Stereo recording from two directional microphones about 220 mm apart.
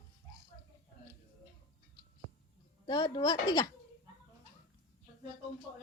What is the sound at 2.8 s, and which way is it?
Speech, 20° left (ahead or behind).